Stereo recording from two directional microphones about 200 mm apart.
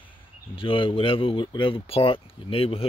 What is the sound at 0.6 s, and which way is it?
Speech, 25° left (ahead or behind).